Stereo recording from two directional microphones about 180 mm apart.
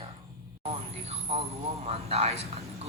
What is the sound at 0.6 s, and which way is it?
Speech, 35° right (ahead or behind).